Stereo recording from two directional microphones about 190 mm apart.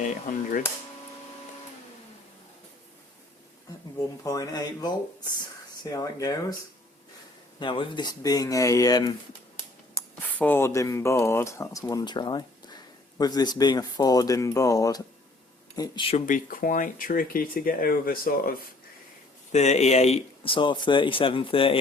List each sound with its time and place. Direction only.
4.2 s speech: 20° left (ahead or behind)
7.6 s speech: 25° left (ahead or behind)
10.3 s speech: 10° left (ahead or behind); by 16.2 s 25° left (ahead or behind)
16.2 s speech: 45° left (ahead or behind)
19.5 s speech: 35° left (ahead or behind)